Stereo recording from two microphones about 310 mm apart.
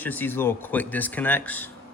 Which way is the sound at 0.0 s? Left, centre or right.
Centre.